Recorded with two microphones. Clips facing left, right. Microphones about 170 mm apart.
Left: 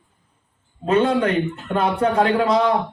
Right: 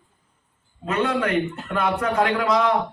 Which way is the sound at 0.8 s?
30° left (ahead or behind).